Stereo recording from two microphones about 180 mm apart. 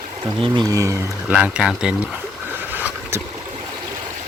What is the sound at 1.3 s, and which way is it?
Speech, 5° right (ahead or behind).